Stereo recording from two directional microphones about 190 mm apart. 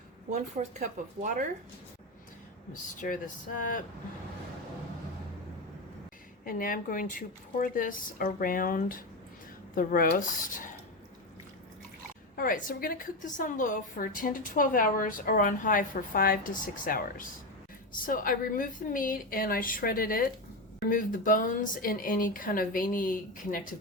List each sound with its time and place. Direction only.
0.3 s speech: 40° right (ahead or behind)
3.0 s a woman's voice: 50° left (ahead or behind)
6.4 s a woman's voice: 45° left (ahead or behind)
12.4 s a woman's voice: 45° left (ahead or behind)